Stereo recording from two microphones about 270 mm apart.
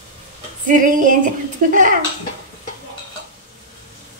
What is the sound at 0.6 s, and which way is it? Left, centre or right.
Speech, right.